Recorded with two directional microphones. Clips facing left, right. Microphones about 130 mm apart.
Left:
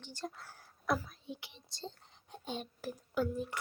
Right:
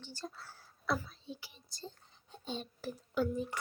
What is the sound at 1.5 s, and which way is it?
Speech, 25° left (ahead or behind).